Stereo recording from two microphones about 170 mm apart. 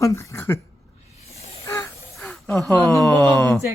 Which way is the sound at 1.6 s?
15° left (ahead or behind).